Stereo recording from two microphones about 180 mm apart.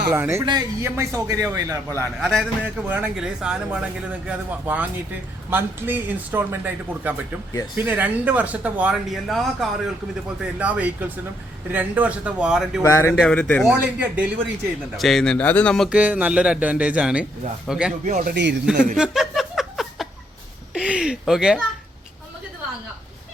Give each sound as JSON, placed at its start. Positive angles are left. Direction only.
{"t": 0.1, "sound": "a man's voice", "side_deg": -15}
{"t": 2.2, "sound": "speech", "side_deg": 0}
{"t": 2.8, "sound": "speech", "side_deg": -10}
{"t": 12.8, "sound": "speech", "side_deg": 15}
{"t": 13.1, "sound": "speech", "side_deg": 5}
{"t": 13.7, "sound": "speech", "side_deg": -10}
{"t": 15.9, "sound": "speech", "side_deg": -10}
{"t": 18.0, "sound": "a man's voice", "side_deg": -45}
{"t": 18.3, "sound": "speech", "side_deg": -75}
{"t": 18.6, "sound": "speech", "side_deg": -5}
{"t": 18.9, "sound": "chuckle", "side_deg": -5}
{"t": 20.7, "sound": "speech", "side_deg": -5}